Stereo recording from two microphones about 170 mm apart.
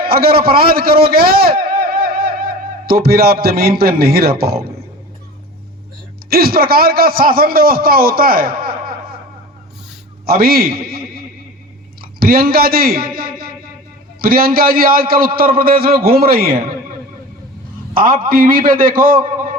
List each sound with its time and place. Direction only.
0.0 s a man's voice: 65° right (ahead or behind)
6.3 s a man's voice: 60° right (ahead or behind)
10.2 s a man's voice: 60° right (ahead or behind)
17.9 s a man's voice: 55° right (ahead or behind)